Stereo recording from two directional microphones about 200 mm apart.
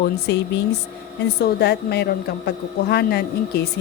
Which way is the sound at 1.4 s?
55° left (ahead or behind).